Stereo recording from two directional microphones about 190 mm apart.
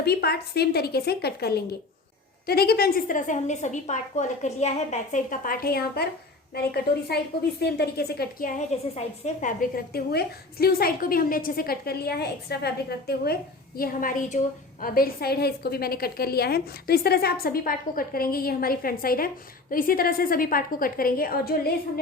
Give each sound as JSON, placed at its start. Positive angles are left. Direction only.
{"t": 0.0, "sound": "a woman's voice", "side_deg": 55}